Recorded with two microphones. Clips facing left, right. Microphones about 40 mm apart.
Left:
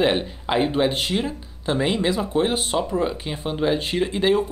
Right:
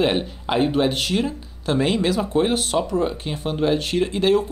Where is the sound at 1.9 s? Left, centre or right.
Left.